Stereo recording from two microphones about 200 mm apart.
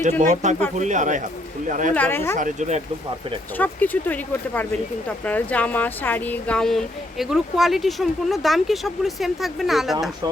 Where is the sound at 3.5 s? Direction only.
10° left (ahead or behind).